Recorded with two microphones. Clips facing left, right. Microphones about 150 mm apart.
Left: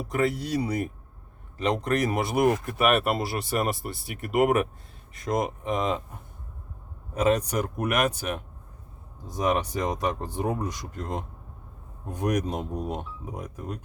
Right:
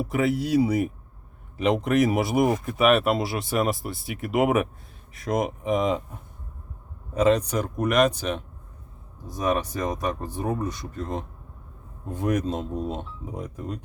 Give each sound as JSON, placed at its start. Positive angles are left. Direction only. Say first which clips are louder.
{"t": 0.0, "sound": "speech", "louder": "right 2 dB", "side_deg": -5}
{"t": 7.1, "sound": "speech", "louder": "right 3 dB", "side_deg": 10}